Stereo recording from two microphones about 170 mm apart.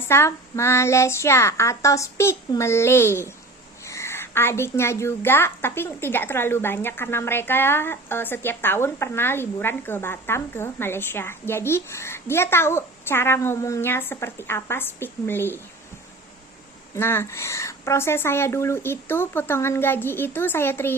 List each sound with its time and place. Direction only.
0.0 s a woman's voice: 15° left (ahead or behind)
16.9 s a woman's voice: 15° left (ahead or behind)